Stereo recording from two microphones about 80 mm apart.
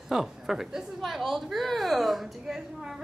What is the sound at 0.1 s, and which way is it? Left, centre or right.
A woman's voice, centre.